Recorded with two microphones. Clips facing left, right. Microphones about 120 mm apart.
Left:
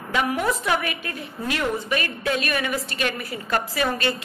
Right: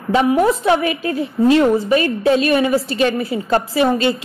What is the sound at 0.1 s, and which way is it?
A woman's voice, 30° right (ahead or behind).